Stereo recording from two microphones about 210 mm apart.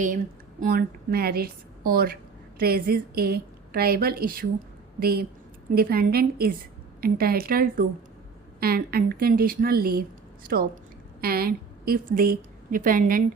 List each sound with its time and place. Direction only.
0.6 s a woman's voice: 45° right (ahead or behind)